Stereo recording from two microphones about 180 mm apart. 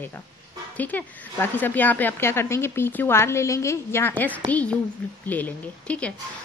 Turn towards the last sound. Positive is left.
turn(degrees=10)  # may be behind; listen again after turning